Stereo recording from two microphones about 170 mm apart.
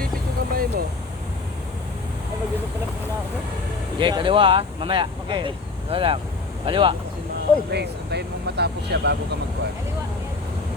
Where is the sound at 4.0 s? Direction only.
30° right (ahead or behind).